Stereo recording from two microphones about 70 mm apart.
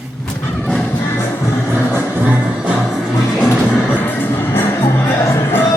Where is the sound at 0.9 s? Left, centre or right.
Left.